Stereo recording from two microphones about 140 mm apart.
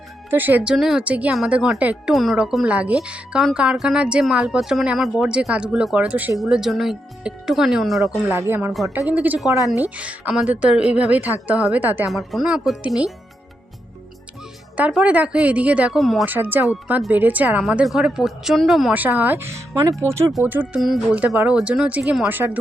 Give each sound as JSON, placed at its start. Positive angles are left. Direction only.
{"t": 0.3, "sound": "speech", "side_deg": -15}
{"t": 8.0, "sound": "speech", "side_deg": -15}
{"t": 12.0, "sound": "speech", "side_deg": 0}
{"t": 14.8, "sound": "speech", "side_deg": -10}
{"t": 16.2, "sound": "speech", "side_deg": -15}
{"t": 18.9, "sound": "speech", "side_deg": -10}